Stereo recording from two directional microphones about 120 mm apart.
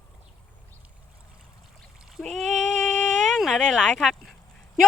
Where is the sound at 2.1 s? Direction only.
Centre (ahead or behind).